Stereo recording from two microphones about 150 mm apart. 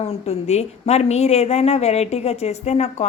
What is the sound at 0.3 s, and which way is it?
A woman's voice, 45° left (ahead or behind).